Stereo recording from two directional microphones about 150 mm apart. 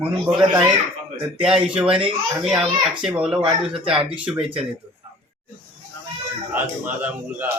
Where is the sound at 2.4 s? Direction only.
35° right (ahead or behind).